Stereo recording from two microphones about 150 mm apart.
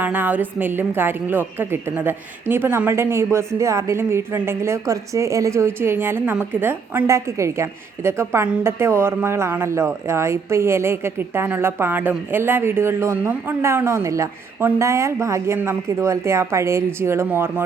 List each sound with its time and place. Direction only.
0.0 s a woman's voice: 10° right (ahead or behind)